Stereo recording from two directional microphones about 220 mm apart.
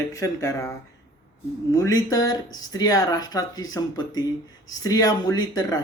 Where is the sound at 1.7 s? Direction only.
15° left (ahead or behind).